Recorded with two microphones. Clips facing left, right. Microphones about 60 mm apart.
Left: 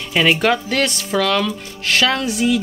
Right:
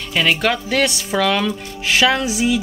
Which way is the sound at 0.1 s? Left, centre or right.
Centre.